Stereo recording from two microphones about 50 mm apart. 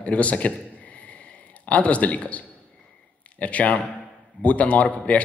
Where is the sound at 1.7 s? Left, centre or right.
Left.